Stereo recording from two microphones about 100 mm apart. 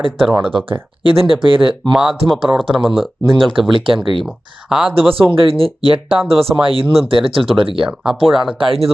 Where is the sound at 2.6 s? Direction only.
60° right (ahead or behind).